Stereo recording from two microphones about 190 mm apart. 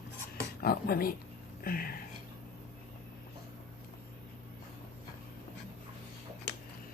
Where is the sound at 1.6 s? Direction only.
50° left (ahead or behind).